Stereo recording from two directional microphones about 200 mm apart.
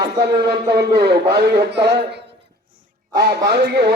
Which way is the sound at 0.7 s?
55° right (ahead or behind).